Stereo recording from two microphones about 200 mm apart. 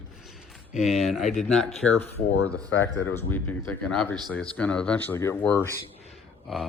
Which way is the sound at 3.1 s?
10° left (ahead or behind).